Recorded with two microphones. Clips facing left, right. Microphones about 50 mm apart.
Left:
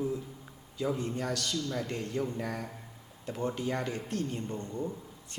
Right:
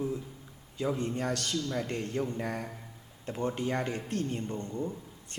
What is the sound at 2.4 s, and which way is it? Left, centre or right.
Speech, centre.